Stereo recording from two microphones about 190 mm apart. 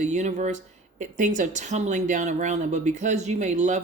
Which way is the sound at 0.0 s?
40° right (ahead or behind).